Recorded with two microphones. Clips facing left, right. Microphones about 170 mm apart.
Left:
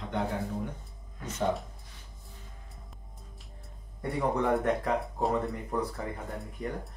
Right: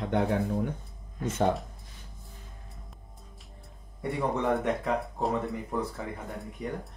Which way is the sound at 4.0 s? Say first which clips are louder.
Even; centre (ahead or behind).